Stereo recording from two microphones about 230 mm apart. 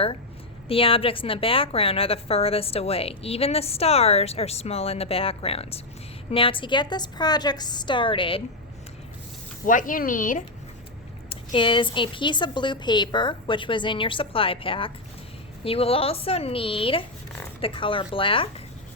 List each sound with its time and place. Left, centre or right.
0.7 s a woman's voice: left
9.6 s speech: left
11.3 s a woman's voice: left